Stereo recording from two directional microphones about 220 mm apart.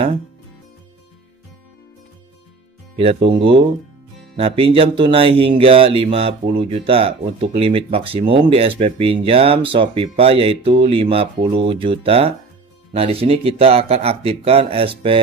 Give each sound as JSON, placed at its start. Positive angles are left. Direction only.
{"t": 3.0, "sound": "speech", "side_deg": -25}